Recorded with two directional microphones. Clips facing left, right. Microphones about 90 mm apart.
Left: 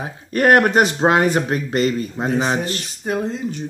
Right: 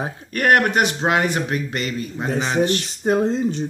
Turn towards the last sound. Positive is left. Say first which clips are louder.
# right 4 dB
turn(degrees=-30)  # may be behind; listen again after turning